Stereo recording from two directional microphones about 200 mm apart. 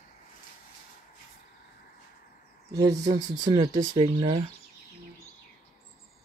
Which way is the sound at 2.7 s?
20° right (ahead or behind).